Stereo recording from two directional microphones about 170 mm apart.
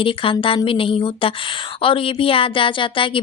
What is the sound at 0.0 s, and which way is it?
A woman's voice, 30° left (ahead or behind).